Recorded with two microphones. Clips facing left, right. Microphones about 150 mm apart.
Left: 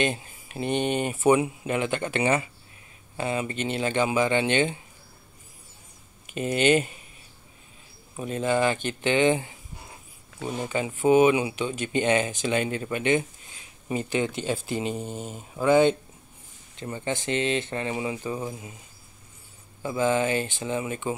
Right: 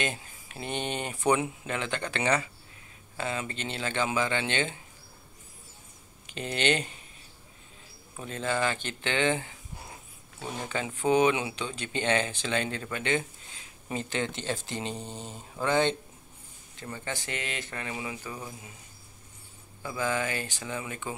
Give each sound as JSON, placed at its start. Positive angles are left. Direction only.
{"t": 0.0, "sound": "speech", "side_deg": 20}
{"t": 6.3, "sound": "speech", "side_deg": 10}
{"t": 8.2, "sound": "speech", "side_deg": 15}
{"t": 10.7, "sound": "speech", "side_deg": 10}
{"t": 16.7, "sound": "speech", "side_deg": 20}
{"t": 19.8, "sound": "speech", "side_deg": 25}